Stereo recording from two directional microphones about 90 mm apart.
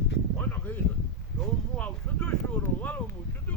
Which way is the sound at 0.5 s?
20° left (ahead or behind).